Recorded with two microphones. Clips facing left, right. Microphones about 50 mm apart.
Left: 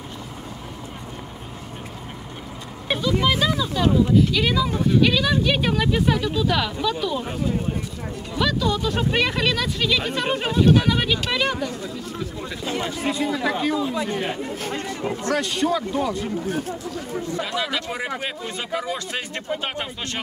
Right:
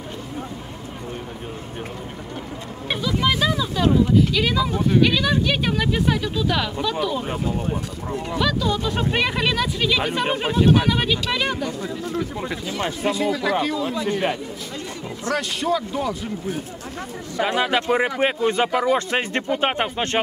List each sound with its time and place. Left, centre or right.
2.9 s a sound: centre
5.0 s speech: centre
8.4 s speech: centre
11.8 s speech: right
13.0 s speech: centre
13.3 s speech: centre
14.4 s speech: left
15.3 s speech: centre
17.4 s speech: right